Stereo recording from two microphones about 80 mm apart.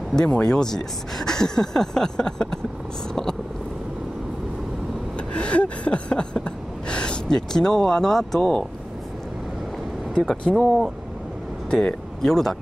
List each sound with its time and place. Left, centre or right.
0.1 s speech: centre
5.3 s a sound: centre
8.4 s speech: centre
10.5 s speech: centre